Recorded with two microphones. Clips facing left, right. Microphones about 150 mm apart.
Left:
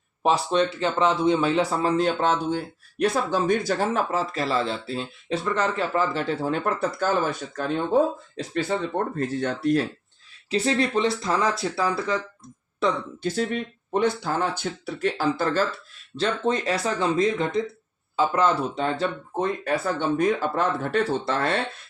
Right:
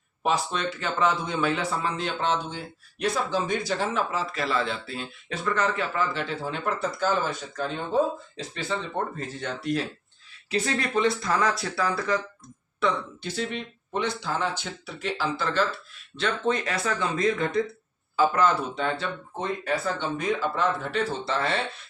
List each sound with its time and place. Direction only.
0.2 s speech: 30° left (ahead or behind)
2.0 s speech: 45° left (ahead or behind)
9.1 s speech: 50° left (ahead or behind)
10.5 s speech: 30° left (ahead or behind)
12.8 s speech: 45° left (ahead or behind)
16.1 s speech: 35° left (ahead or behind); by 21.6 s 50° left (ahead or behind)